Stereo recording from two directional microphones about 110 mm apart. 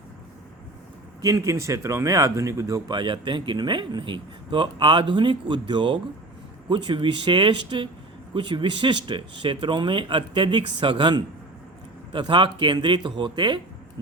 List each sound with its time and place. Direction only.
1.2 s speech: 30° right (ahead or behind)